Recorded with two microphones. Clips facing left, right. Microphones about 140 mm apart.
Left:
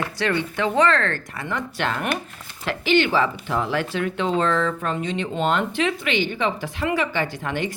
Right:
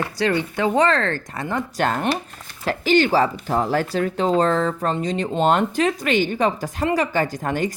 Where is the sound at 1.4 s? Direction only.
35° right (ahead or behind).